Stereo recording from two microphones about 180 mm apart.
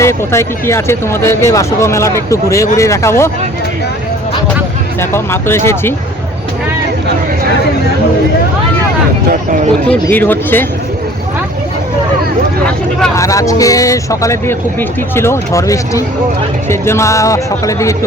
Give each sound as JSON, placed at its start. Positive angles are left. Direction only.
{"t": 0.0, "sound": "speech", "side_deg": 15}
{"t": 4.9, "sound": "speech", "side_deg": 15}
{"t": 9.9, "sound": "speech", "side_deg": 10}
{"t": 13.1, "sound": "speech", "side_deg": 20}